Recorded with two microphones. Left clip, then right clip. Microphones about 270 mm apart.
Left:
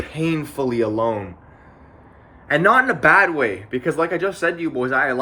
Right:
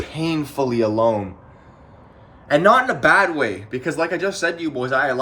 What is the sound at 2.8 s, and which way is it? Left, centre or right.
Speech, centre.